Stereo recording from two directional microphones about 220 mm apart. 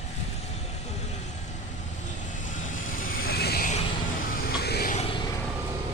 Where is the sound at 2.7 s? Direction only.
40° left (ahead or behind).